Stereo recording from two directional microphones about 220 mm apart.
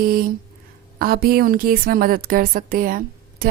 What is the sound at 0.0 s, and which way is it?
Speech, 40° right (ahead or behind).